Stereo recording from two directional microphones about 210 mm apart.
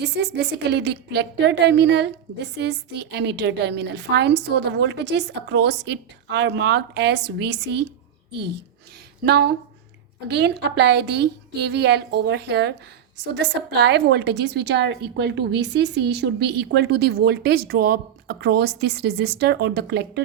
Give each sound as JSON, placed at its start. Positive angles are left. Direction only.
{"t": 0.0, "sound": "a woman's voice", "side_deg": -55}
{"t": 9.2, "sound": "a woman's voice", "side_deg": -50}